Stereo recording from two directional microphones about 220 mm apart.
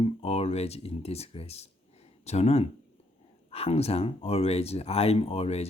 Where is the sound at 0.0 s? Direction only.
25° left (ahead or behind).